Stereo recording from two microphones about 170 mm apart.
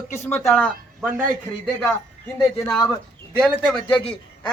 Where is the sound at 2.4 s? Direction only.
5° left (ahead or behind).